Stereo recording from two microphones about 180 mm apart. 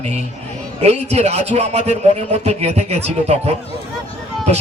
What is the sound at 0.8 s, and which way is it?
A man's voice, 35° right (ahead or behind).